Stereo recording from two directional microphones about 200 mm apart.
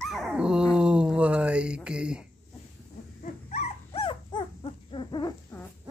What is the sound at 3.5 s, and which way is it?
Dog, 30° left (ahead or behind).